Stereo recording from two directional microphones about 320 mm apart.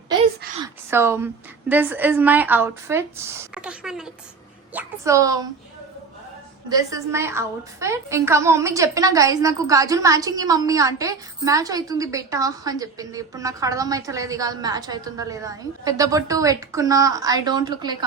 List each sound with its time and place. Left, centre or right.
0.6 s a woman's voice: centre
3.5 s a sound: centre
4.7 s a woman's voice: centre
6.7 s a woman's voice: centre